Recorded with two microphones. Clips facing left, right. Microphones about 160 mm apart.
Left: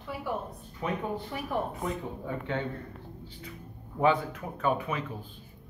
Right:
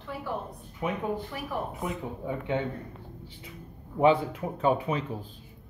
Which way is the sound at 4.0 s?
25° right (ahead or behind).